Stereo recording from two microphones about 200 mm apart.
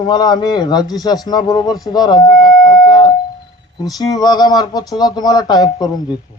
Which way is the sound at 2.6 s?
20° left (ahead or behind).